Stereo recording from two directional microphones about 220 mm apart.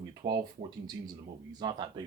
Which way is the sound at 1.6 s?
20° right (ahead or behind).